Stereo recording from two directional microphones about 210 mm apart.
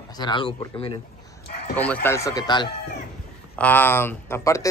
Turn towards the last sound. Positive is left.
turn(degrees=15)  # may be behind; listen again after turning